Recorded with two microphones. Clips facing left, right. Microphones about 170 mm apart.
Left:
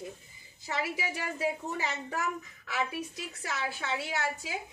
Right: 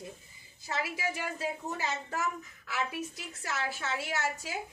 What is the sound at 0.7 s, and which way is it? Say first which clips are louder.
Speech: left 1 dB; 15° left (ahead or behind).